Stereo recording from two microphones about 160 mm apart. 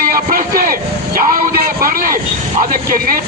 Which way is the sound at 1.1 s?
65° right (ahead or behind).